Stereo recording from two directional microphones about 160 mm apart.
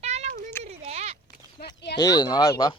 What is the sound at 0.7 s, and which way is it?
Speech, 40° right (ahead or behind).